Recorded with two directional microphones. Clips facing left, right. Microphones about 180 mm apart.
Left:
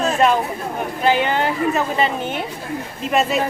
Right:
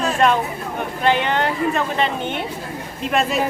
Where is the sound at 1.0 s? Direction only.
5° left (ahead or behind).